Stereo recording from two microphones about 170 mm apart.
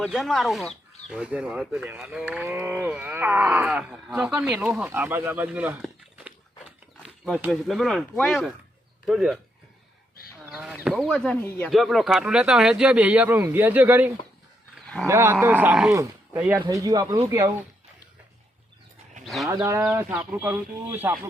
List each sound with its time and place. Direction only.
0.0 s speech: centre (ahead or behind)
7.0 s a sound: centre (ahead or behind)
7.5 s speech: centre (ahead or behind)
10.4 s a sound: 5° right (ahead or behind)
11.0 s speech: 5° left (ahead or behind)
11.7 s speech: centre (ahead or behind); by 17.5 s 15° right (ahead or behind)
19.2 s sheep: centre (ahead or behind)
19.5 s speech: 10° right (ahead or behind)